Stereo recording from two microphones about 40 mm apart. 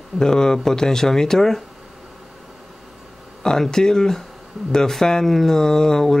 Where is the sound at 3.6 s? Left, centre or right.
Centre.